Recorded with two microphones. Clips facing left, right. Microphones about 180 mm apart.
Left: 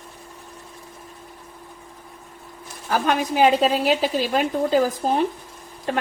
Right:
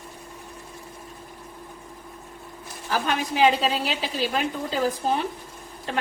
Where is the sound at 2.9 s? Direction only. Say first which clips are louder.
Left 4 dB; 50° left (ahead or behind).